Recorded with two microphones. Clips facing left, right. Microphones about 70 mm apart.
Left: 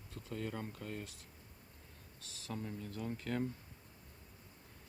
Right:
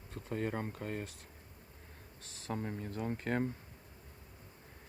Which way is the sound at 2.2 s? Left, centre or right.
Right.